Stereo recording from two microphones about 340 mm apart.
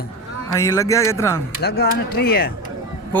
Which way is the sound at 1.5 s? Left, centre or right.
Left.